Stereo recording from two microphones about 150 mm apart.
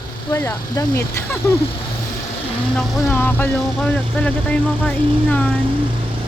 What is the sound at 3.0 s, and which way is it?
Speech, 15° left (ahead or behind).